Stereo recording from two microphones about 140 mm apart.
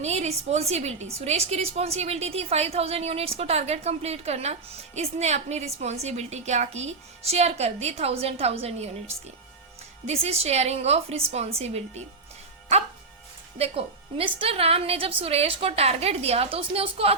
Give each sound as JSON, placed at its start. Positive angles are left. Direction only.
{"t": 0.0, "sound": "a woman's voice", "side_deg": -50}
{"t": 13.6, "sound": "a woman's voice", "side_deg": -45}